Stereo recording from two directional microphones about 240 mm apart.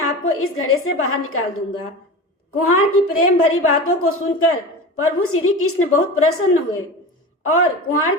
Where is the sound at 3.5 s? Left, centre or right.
Left.